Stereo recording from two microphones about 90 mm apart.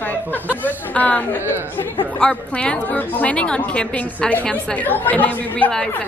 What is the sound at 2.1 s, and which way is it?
A woman's voice, 15° left (ahead or behind).